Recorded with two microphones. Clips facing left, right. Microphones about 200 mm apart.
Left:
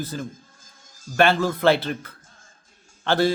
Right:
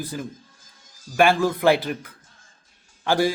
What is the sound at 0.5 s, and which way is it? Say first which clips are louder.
Music: left 2 dB; 50° left (ahead or behind).